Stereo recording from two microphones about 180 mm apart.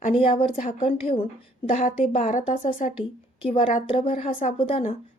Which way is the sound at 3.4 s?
30° left (ahead or behind).